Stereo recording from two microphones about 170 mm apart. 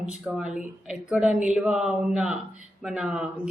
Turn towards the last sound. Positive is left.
turn(degrees=-5)  # may be behind; listen again after turning